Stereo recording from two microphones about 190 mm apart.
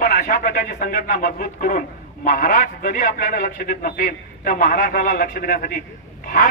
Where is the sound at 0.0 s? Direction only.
50° left (ahead or behind).